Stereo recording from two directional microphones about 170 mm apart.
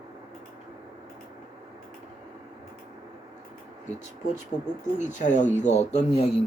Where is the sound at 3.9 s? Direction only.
45° left (ahead or behind).